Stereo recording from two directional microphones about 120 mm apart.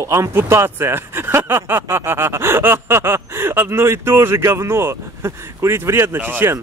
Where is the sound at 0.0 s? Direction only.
25° right (ahead or behind).